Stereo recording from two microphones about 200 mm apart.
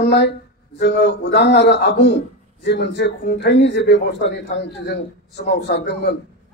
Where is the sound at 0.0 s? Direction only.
55° left (ahead or behind).